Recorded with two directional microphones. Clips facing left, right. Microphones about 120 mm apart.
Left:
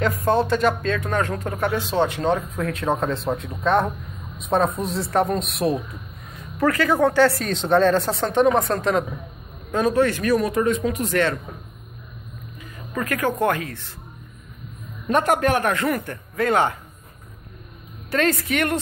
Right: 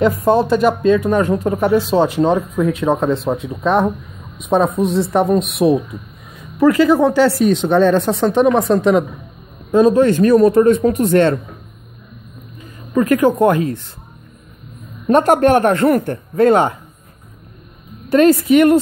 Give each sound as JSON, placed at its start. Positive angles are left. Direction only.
{"t": 0.3, "sound": "a woman's voice", "side_deg": -10}
{"t": 6.7, "sound": "speech", "side_deg": -20}
{"t": 7.2, "sound": "a woman's voice", "side_deg": -5}
{"t": 9.8, "sound": "speech", "side_deg": -20}
{"t": 10.1, "sound": "speech", "side_deg": -30}
{"t": 11.1, "sound": "speech", "side_deg": -30}
{"t": 12.9, "sound": "speech", "side_deg": -15}
{"t": 15.0, "sound": "speech", "side_deg": -35}
{"t": 16.1, "sound": "speech", "side_deg": -30}
{"t": 18.1, "sound": "speech", "side_deg": -15}